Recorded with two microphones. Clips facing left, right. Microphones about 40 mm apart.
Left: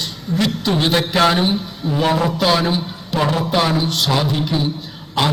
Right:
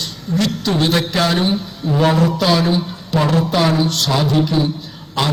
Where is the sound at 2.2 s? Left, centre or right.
Centre.